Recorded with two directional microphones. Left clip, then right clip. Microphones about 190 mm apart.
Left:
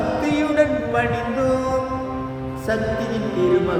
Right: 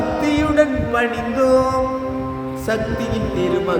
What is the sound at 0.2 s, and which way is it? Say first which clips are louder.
Music: right 3 dB; 25° right (ahead or behind).